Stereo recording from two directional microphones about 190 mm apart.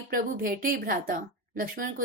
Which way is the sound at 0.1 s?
50° right (ahead or behind).